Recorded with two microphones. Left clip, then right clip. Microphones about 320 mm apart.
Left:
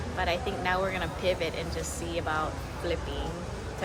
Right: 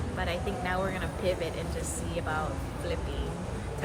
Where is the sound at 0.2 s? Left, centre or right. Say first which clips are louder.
Left 4 dB; left.